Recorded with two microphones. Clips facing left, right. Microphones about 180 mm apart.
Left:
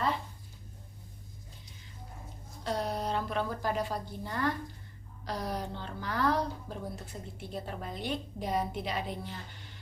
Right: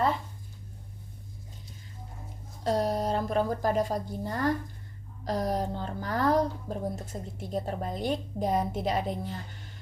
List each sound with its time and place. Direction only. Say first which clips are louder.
2.7 s a woman's voice: right 5 dB; 45° right (ahead or behind)